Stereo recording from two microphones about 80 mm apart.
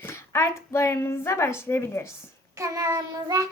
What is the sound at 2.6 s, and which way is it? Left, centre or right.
Child singing, right.